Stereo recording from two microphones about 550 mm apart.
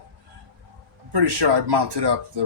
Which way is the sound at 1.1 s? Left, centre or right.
Right.